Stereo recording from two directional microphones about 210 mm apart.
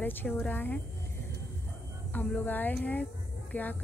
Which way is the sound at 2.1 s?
10° left (ahead or behind).